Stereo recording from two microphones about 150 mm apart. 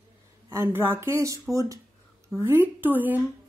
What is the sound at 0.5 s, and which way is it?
Speech, 15° right (ahead or behind).